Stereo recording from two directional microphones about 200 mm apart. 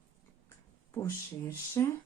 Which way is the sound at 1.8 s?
15° left (ahead or behind).